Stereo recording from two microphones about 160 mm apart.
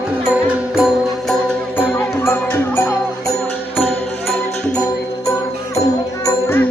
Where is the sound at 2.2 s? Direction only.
15° left (ahead or behind).